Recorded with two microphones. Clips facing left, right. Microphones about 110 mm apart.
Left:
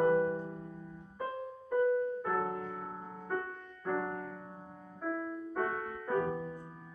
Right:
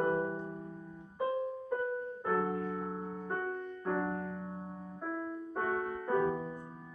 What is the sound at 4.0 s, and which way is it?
Music, 5° right (ahead or behind).